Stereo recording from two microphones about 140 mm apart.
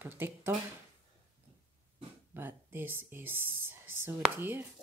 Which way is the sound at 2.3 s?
15° right (ahead or behind).